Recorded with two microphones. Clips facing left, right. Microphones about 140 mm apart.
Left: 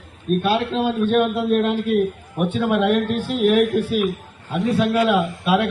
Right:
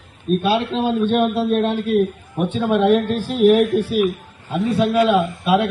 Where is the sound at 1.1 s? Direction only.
25° right (ahead or behind).